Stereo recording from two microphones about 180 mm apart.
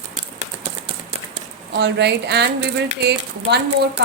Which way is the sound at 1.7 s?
70° right (ahead or behind).